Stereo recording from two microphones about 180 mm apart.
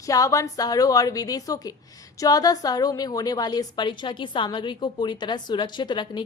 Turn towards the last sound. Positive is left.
turn(degrees=25)  # may be behind; listen again after turning